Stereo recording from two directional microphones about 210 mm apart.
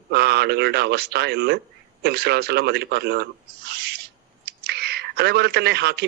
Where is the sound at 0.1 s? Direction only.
50° right (ahead or behind).